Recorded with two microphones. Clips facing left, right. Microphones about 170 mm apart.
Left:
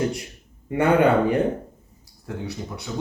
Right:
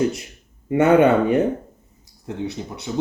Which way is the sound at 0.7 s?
25° right (ahead or behind).